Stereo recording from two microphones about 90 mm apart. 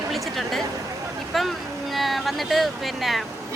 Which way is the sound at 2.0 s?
Centre (ahead or behind).